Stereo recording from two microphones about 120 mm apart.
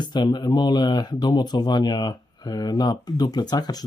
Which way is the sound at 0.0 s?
35° left (ahead or behind).